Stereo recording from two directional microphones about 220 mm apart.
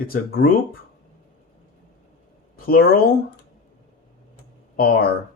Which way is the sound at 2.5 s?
40° left (ahead or behind).